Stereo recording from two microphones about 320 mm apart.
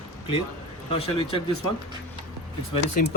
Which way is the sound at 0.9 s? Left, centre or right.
Centre.